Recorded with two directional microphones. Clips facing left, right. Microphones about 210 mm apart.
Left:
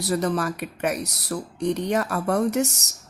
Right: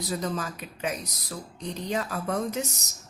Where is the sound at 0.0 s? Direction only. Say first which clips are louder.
Left 7 dB; 75° left (ahead or behind).